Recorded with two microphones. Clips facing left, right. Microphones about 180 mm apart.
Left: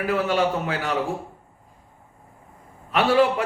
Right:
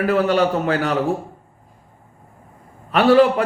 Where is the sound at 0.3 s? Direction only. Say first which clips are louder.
Right 5 dB; 55° right (ahead or behind).